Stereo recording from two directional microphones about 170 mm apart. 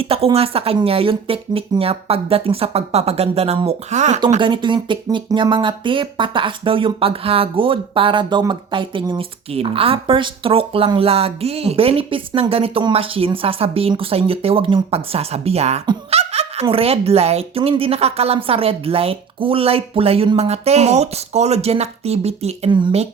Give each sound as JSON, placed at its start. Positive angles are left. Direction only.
{"t": 0.0, "sound": "speech", "side_deg": -35}
{"t": 4.4, "sound": "speech", "side_deg": -30}